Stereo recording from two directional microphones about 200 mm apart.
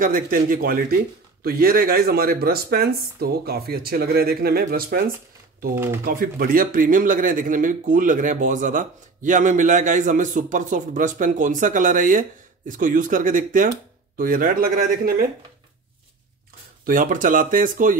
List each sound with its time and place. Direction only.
0.0 s a man's voice: 45° right (ahead or behind)
16.8 s speech: 40° right (ahead or behind)